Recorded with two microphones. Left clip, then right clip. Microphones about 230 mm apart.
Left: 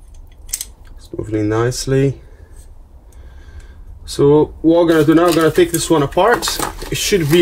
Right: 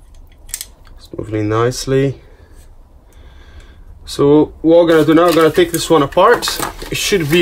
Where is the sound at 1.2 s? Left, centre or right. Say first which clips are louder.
Right 1 dB; right.